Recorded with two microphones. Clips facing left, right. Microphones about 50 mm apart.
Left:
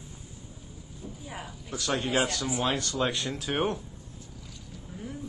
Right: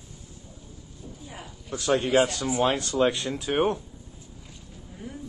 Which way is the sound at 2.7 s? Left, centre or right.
Right.